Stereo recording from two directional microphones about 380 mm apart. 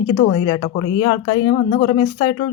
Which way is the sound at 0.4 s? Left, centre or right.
Centre.